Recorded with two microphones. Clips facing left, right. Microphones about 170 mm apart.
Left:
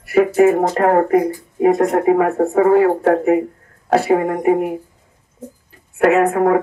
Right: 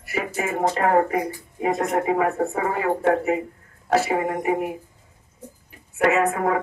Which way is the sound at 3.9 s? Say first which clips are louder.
Left 6 dB; 50° left (ahead or behind).